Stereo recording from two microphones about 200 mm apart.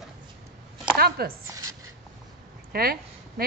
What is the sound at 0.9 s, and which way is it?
Speech, 50° right (ahead or behind).